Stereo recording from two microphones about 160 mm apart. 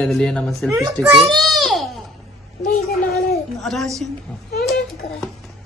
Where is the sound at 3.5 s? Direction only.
Centre (ahead or behind).